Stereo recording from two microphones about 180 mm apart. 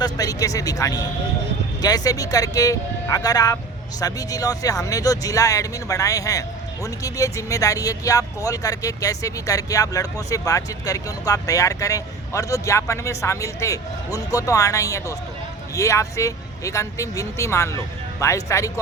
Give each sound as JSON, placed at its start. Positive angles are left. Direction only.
{"t": 0.0, "sound": "speech", "side_deg": 20}